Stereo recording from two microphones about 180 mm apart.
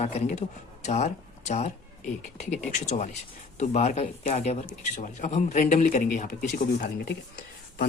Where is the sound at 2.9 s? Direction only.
40° left (ahead or behind).